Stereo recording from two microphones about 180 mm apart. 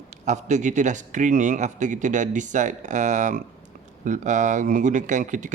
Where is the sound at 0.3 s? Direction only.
40° right (ahead or behind).